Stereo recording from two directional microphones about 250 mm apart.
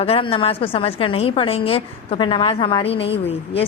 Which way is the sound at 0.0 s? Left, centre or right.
Left.